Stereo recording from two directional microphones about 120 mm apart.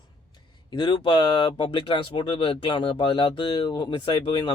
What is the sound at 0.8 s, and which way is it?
Speech, 40° left (ahead or behind).